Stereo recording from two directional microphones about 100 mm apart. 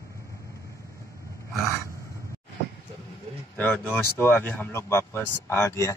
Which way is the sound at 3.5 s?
20° left (ahead or behind).